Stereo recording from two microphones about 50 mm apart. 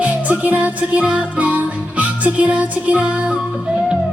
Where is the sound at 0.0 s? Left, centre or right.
Right.